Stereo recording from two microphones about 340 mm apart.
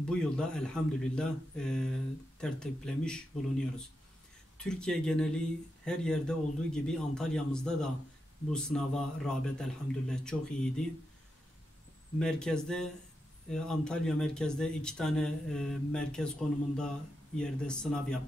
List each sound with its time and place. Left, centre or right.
0.0 s speech: centre
4.6 s speech: centre
12.2 s speech: centre